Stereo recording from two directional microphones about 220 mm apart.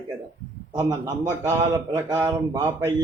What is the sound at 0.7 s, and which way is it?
Speech, 15° right (ahead or behind).